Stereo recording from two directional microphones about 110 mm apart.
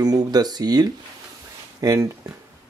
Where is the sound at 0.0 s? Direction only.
35° right (ahead or behind).